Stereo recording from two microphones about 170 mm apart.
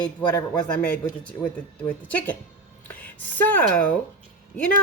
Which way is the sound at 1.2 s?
5° left (ahead or behind).